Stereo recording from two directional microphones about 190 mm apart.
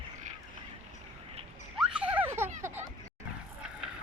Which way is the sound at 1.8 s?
5° right (ahead or behind).